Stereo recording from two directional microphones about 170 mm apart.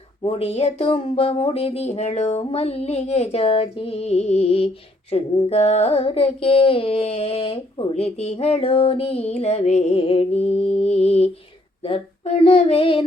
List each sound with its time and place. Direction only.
0.2 s female singing: 35° left (ahead or behind)